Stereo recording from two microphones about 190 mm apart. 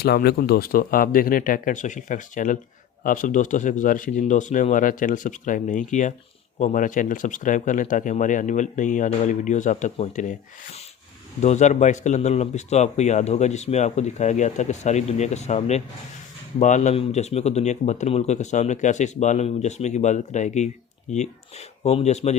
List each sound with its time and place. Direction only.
0.0 s a man's voice: 55° left (ahead or behind); by 10.3 s 40° left (ahead or behind)
11.3 s a man's voice: 35° left (ahead or behind)
21.8 s a man's voice: 35° left (ahead or behind)